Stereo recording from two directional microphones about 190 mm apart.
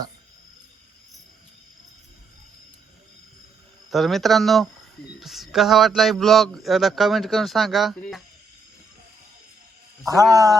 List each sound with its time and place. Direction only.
3.8 s speech: centre (ahead or behind)
10.3 s speech: 20° right (ahead or behind)